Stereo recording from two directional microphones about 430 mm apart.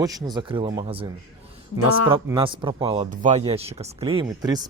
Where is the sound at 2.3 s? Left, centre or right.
Centre.